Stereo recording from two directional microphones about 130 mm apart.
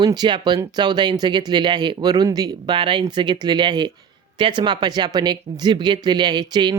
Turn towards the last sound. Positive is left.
turn(degrees=-35)  # may be behind; listen again after turning